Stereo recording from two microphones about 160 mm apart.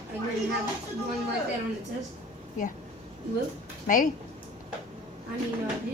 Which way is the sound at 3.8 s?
55° left (ahead or behind).